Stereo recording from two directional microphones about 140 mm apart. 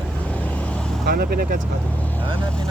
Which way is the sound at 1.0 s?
90° right.